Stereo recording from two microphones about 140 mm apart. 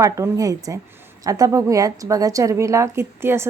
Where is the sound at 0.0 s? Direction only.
25° right (ahead or behind).